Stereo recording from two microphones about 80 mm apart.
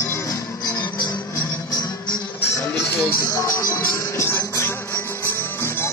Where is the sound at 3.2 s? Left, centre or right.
Left.